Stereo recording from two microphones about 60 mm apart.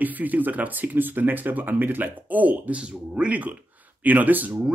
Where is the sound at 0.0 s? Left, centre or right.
Right.